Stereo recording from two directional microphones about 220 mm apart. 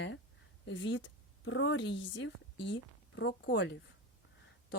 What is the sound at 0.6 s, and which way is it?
A woman's voice, 55° left (ahead or behind).